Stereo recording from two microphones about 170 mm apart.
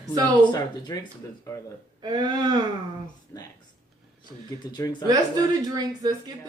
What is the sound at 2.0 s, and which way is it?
Speech, 25° right (ahead or behind).